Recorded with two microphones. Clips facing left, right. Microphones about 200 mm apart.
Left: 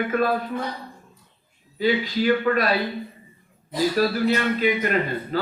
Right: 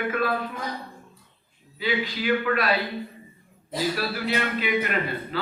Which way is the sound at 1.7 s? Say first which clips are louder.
Left 6 dB; 40° left (ahead or behind).